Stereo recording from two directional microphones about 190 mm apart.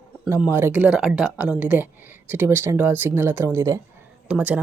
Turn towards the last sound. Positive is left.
turn(degrees=-5)  # may be behind; listen again after turning